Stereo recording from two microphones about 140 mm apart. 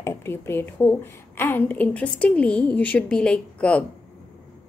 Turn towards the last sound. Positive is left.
turn(degrees=10)  # may be behind; listen again after turning